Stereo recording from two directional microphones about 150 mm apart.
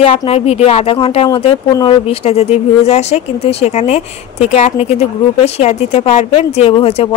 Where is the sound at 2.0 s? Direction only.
45° left (ahead or behind).